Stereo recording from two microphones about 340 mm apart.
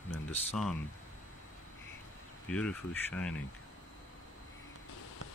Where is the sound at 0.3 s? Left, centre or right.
Centre.